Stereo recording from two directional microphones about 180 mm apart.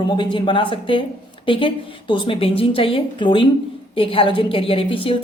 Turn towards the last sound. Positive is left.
turn(degrees=30)  # may be behind; listen again after turning